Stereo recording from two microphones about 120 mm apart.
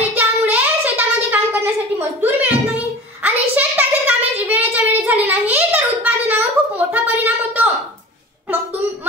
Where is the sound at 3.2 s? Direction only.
15° right (ahead or behind).